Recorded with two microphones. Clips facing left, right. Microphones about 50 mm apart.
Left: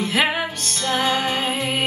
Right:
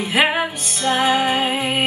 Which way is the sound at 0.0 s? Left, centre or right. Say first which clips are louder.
Right 3 dB; centre.